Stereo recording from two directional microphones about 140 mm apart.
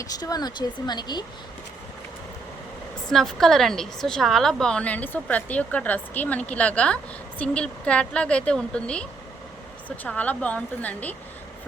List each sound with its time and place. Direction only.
0.0 s speech: 25° left (ahead or behind)
3.1 s a woman's voice: 5° left (ahead or behind)